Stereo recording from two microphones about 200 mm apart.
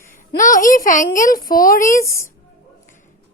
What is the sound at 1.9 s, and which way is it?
Speech, 15° left (ahead or behind).